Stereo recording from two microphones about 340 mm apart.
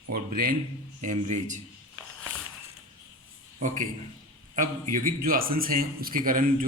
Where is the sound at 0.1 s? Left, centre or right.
Right.